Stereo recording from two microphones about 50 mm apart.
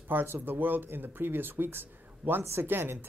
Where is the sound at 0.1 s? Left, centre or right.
Right.